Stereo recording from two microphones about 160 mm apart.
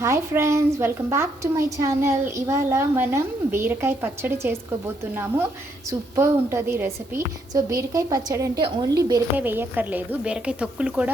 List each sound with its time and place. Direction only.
0.0 s a woman's voice: 15° right (ahead or behind)
6.1 s a woman's voice: 15° right (ahead or behind)